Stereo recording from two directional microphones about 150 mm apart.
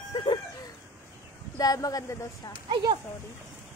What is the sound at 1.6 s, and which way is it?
Speech, 25° left (ahead or behind).